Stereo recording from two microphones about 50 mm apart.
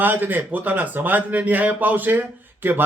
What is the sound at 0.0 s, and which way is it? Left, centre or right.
A man's voice, right.